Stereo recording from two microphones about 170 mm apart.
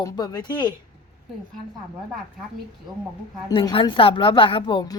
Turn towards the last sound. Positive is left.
turn(degrees=30)  # may be behind; listen again after turning